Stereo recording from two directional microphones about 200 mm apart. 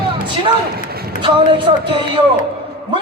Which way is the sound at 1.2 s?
25° right (ahead or behind).